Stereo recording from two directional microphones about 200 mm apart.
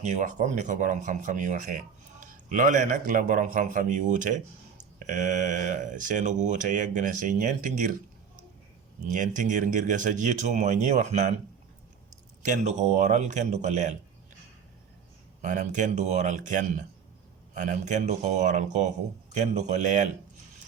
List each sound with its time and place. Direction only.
0.0 s speech: 35° right (ahead or behind)
9.0 s speech: 40° right (ahead or behind)
12.5 s speech: 35° right (ahead or behind)
15.4 s speech: 40° right (ahead or behind)